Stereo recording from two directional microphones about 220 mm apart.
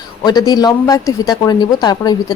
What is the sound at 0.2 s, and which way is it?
A woman's voice, 20° left (ahead or behind).